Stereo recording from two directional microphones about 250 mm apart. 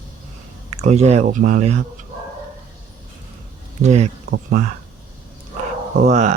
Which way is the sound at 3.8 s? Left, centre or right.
Right.